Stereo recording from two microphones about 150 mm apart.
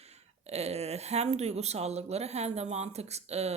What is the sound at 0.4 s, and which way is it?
Speech, 45° right (ahead or behind).